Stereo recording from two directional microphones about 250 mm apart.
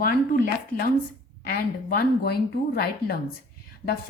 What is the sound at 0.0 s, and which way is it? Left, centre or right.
A woman's voice, left.